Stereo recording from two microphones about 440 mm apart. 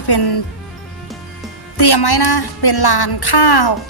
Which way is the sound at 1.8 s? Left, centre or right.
Left.